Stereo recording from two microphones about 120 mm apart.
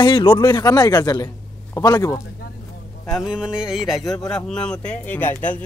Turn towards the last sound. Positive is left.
turn(degrees=15)  # may be behind; listen again after turning